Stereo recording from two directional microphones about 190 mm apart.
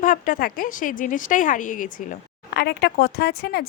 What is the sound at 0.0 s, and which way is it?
A woman's voice, 45° left (ahead or behind).